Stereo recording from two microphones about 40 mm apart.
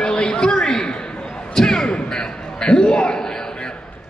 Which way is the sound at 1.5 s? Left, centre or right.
Centre.